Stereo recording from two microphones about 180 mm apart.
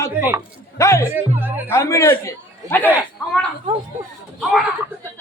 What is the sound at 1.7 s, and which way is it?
A man's voice, 15° left (ahead or behind).